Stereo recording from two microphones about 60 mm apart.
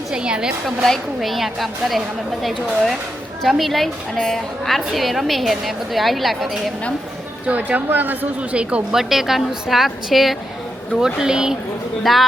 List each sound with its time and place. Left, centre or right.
0.1 s a woman's voice: centre
0.6 s a woman's voice: centre
7.4 s a man's voice: right
8.5 s speech: centre
9.0 s a woman's voice: centre
12.1 s a woman's voice: centre